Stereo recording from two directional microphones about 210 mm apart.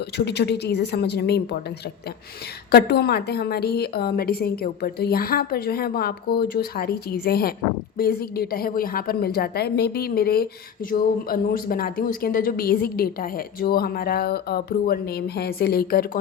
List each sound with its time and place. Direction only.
0.3 s a woman's voice: 55° left (ahead or behind)
2.7 s a woman's voice: 50° left (ahead or behind)